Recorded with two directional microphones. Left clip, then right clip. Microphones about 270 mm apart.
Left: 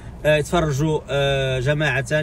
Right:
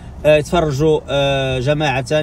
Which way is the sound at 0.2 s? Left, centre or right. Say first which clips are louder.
Right 5 dB; centre.